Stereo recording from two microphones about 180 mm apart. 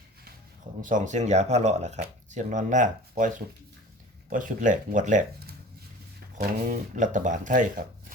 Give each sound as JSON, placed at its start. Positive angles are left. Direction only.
{"t": 0.8, "sound": "speech", "side_deg": -45}
{"t": 6.3, "sound": "speech", "side_deg": -45}